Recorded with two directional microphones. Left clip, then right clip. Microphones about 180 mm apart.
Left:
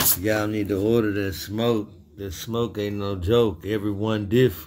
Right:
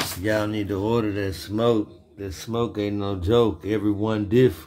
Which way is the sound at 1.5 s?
15° right (ahead or behind).